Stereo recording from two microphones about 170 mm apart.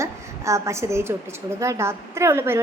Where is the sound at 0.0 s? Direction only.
15° right (ahead or behind).